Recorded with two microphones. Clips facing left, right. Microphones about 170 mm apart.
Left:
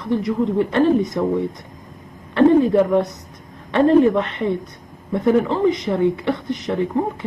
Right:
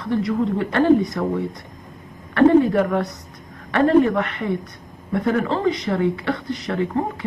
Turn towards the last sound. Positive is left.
turn(degrees=20)  # may be behind; listen again after turning